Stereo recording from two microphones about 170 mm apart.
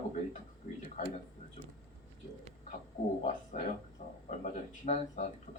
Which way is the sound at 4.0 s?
45° left (ahead or behind).